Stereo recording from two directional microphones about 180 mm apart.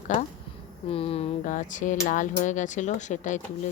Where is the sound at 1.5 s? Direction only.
45° left (ahead or behind).